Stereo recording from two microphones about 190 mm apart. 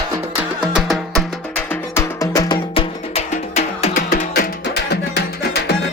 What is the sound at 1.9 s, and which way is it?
Music, 15° left (ahead or behind).